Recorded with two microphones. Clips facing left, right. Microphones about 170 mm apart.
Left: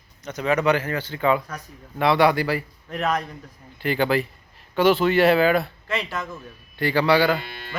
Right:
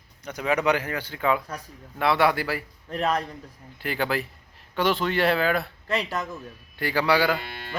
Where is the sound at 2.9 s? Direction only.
30° right (ahead or behind).